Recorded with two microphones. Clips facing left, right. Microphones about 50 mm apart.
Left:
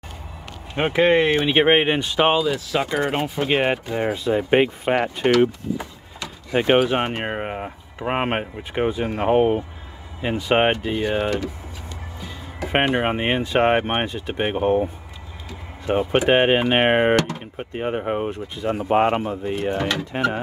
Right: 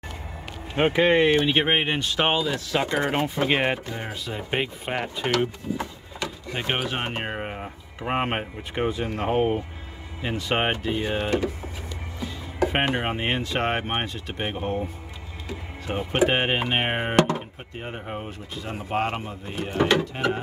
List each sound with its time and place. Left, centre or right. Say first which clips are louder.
0.7 s speech: left 2 dB; centre
3.9 s speech: left 11 dB; left
6.5 s speech: left 11 dB; centre
11.2 s speech: left 1 dB; centre
12.6 s speech: left 4 dB; centre
15.9 s speech: left 5 dB; centre
16.7 s speech: left 8 dB; left
17.1 s speech: left 1 dB; right
17.6 s speech: left 10 dB; left
19.8 s speech: right 3 dB; centre